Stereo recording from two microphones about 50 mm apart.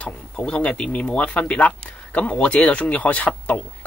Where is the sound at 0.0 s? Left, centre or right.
Left.